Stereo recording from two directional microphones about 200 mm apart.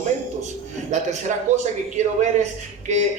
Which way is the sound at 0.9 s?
35° right (ahead or behind).